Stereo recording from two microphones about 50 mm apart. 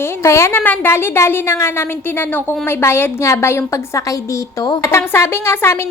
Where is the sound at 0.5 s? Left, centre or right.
Left.